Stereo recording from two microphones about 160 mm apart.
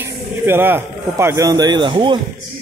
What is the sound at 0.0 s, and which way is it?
A man's voice, 15° right (ahead or behind).